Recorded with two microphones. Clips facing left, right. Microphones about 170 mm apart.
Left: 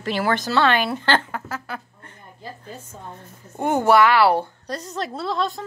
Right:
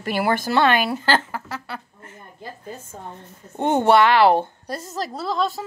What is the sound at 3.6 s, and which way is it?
Speech, 25° right (ahead or behind).